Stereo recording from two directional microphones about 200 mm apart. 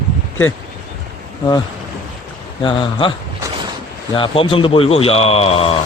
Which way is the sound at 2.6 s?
25° left (ahead or behind).